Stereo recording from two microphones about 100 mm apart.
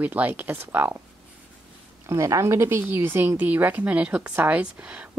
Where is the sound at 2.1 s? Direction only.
30° right (ahead or behind).